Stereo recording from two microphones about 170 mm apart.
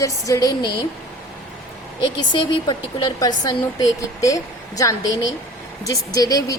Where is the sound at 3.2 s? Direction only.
20° left (ahead or behind).